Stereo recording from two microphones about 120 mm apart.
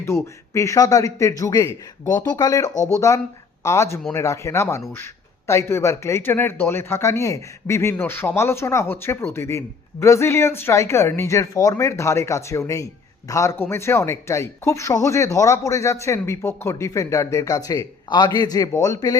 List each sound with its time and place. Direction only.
0.0 s speech: 25° left (ahead or behind)